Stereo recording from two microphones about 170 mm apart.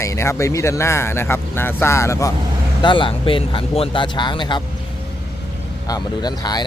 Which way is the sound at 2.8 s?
30° left (ahead or behind).